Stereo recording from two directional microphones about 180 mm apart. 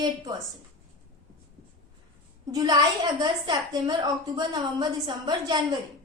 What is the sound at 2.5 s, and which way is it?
A child's voice, 20° right (ahead or behind).